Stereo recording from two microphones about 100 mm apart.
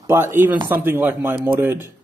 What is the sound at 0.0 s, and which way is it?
Speech, 25° right (ahead or behind).